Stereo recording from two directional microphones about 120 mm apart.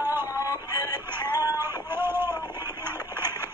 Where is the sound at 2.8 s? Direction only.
20° right (ahead or behind).